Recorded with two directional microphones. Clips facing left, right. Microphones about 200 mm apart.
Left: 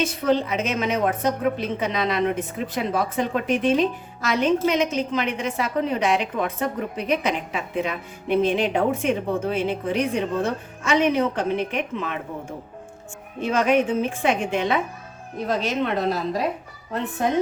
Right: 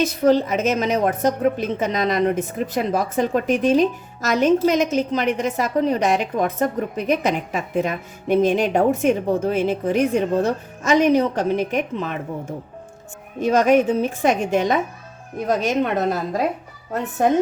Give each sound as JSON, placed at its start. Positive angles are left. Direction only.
{"t": 0.0, "sound": "a woman's voice", "side_deg": -40}